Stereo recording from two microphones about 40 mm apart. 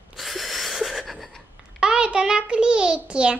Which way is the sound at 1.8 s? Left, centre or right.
Right.